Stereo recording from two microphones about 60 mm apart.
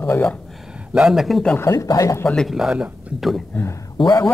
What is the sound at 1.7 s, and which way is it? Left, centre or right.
Speech, left.